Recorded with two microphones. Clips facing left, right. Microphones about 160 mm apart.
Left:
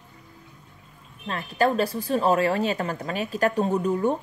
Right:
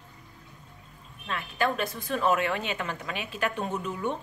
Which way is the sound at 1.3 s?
40° left (ahead or behind).